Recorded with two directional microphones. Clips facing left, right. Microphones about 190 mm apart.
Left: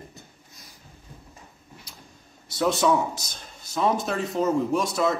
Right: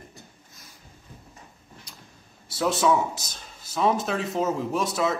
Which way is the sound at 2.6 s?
5° right (ahead or behind).